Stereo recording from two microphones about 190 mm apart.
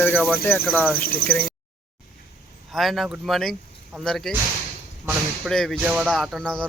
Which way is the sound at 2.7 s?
Centre (ahead or behind).